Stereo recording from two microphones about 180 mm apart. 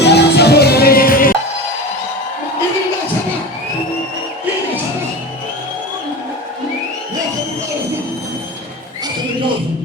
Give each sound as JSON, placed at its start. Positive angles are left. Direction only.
{"t": 0.0, "sound": "music", "side_deg": 65}